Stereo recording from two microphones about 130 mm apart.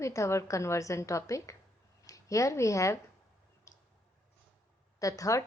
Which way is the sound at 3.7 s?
20° left (ahead or behind).